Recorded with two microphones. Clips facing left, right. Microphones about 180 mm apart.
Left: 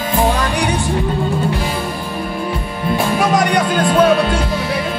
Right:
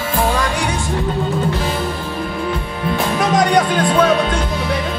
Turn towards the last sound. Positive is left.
turn(degrees=0)  # may be behind; listen again after turning